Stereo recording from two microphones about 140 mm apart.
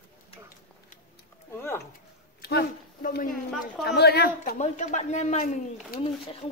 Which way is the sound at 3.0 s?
90° left.